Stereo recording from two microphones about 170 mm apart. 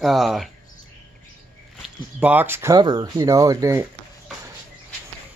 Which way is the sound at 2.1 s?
10° right (ahead or behind).